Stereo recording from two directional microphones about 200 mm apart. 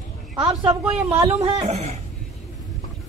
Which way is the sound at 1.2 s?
30° right (ahead or behind).